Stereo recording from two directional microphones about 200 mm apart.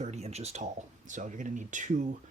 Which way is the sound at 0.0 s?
35° right (ahead or behind).